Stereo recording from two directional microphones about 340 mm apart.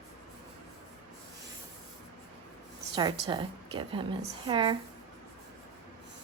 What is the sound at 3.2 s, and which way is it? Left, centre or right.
Speech, centre.